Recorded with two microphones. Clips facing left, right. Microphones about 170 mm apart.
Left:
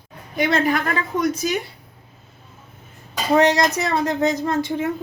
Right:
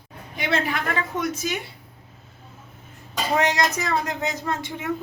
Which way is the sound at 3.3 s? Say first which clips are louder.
Left 6 dB; 35° left (ahead or behind).